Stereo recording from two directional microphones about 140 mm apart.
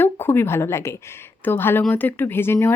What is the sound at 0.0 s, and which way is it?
Speech, 15° left (ahead or behind).